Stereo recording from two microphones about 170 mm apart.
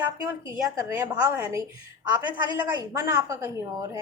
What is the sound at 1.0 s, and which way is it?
Speech, 10° right (ahead or behind).